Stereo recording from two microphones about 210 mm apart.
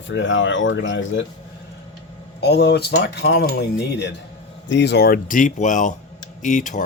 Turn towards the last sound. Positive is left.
turn(degrees=35)  # may be behind; listen again after turning